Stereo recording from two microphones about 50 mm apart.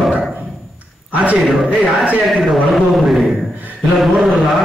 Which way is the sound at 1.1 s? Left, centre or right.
Right.